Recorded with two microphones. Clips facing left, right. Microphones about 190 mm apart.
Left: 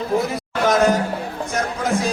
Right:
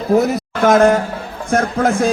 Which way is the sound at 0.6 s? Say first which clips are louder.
Right 5 dB; 55° right (ahead or behind).